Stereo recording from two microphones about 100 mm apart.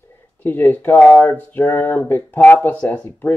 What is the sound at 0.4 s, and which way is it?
Speech, 20° left (ahead or behind).